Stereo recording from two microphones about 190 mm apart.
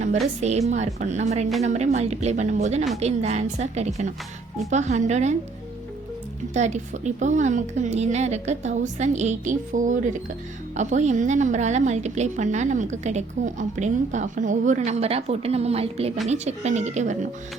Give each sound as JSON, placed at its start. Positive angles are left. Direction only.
{"t": 0.3, "sound": "a woman's voice", "side_deg": -35}
{"t": 6.5, "sound": "a woman's voice", "side_deg": -35}